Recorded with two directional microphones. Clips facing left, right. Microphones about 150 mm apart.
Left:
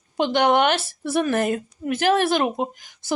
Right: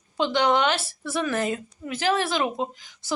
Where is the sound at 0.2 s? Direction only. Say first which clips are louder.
Left 3 dB; 55° left (ahead or behind).